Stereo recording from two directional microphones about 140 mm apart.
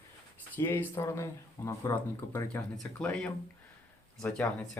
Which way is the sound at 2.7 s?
5° left (ahead or behind).